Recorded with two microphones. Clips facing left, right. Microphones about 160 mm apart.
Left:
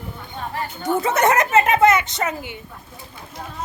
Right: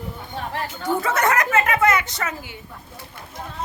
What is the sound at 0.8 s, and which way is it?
Speech, 20° left (ahead or behind).